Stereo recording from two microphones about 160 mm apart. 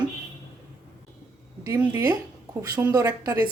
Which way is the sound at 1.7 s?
15° right (ahead or behind).